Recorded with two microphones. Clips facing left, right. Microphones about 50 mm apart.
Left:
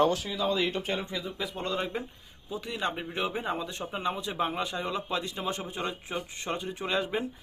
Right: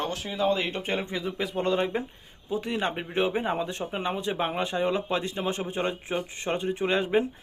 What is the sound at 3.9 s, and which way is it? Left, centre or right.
Speech, right.